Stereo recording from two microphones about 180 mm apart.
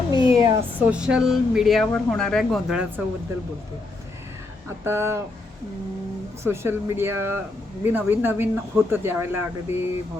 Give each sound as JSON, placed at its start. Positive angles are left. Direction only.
{"t": 0.1, "sound": "cat", "side_deg": 25}
{"t": 0.8, "sound": "speech", "side_deg": -5}
{"t": 4.8, "sound": "speech", "side_deg": -15}
{"t": 6.4, "sound": "speech", "side_deg": -15}